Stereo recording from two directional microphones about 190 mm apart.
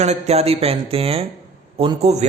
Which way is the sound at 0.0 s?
35° right (ahead or behind).